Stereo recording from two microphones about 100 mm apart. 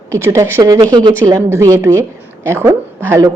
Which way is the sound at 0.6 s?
40° right (ahead or behind).